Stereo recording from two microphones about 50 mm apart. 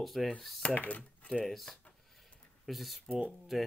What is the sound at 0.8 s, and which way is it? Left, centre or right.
Speech, left.